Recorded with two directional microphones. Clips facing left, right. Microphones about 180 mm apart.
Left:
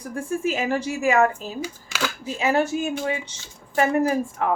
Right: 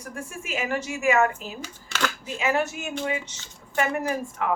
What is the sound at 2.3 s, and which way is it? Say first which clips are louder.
Speech: left 5 dB; 35° left (ahead or behind).